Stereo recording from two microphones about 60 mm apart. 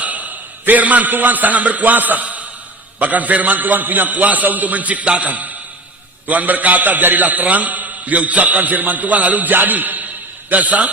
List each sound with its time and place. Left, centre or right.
0.0 s a man's voice: right